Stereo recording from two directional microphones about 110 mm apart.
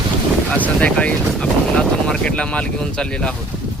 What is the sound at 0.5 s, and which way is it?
Speech, 15° left (ahead or behind).